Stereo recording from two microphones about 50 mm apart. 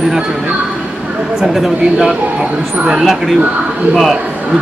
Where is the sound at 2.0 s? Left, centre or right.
Centre.